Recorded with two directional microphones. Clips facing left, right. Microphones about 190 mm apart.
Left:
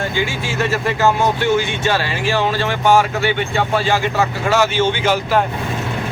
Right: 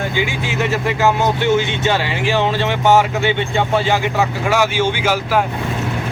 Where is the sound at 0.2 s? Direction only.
15° right (ahead or behind).